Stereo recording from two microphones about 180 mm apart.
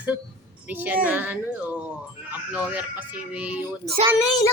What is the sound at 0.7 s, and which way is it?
Speech, 10° right (ahead or behind).